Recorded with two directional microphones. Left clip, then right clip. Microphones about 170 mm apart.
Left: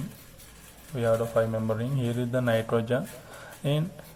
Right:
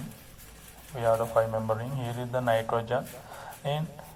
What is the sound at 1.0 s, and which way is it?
Speech, 30° right (ahead or behind).